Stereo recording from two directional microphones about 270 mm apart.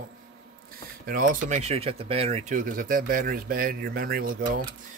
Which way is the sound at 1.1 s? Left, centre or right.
Right.